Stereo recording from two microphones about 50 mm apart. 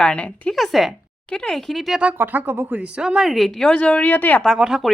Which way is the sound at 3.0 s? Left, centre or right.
Centre.